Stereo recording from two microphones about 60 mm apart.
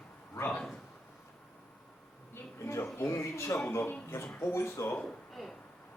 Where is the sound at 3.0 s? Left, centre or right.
Left.